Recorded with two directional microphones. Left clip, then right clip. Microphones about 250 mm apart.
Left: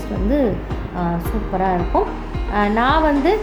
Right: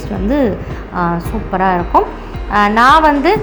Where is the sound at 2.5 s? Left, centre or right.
Centre.